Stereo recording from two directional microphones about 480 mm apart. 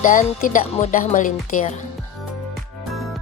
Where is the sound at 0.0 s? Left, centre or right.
Centre.